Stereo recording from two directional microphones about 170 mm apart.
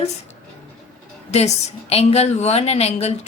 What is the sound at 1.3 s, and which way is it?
A woman's voice, 40° left (ahead or behind).